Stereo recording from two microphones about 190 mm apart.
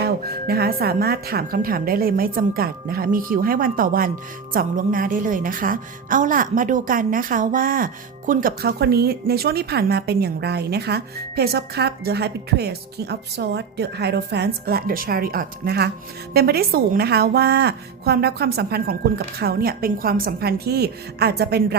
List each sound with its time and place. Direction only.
0.4 s a woman's voice: 55° right (ahead or behind)